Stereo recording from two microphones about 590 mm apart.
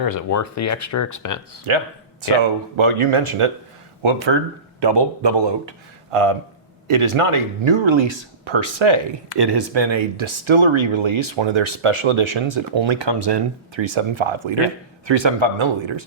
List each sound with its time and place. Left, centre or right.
0.0 s speech: left
2.4 s speech: right